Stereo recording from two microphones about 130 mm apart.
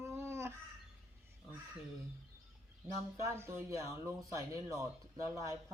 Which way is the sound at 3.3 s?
20° right (ahead or behind).